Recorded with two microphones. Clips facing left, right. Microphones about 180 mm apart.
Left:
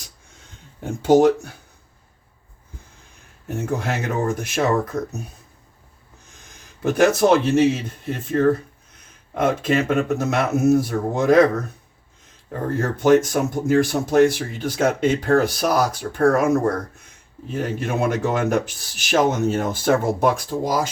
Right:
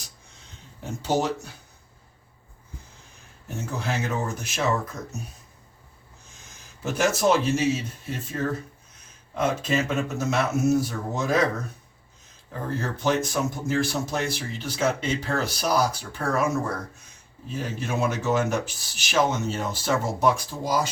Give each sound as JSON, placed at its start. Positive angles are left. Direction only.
{"t": 3.5, "sound": "speech", "side_deg": 55}
{"t": 6.8, "sound": "speech", "side_deg": 55}
{"t": 12.5, "sound": "speech", "side_deg": 55}